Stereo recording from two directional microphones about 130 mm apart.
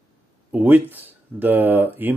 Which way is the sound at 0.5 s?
15° right (ahead or behind).